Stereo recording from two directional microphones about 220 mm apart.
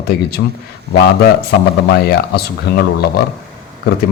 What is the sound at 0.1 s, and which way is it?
A man's voice, 45° left (ahead or behind).